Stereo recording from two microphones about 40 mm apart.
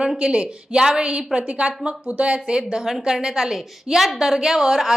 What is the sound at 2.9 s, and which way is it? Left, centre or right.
A woman's voice, centre.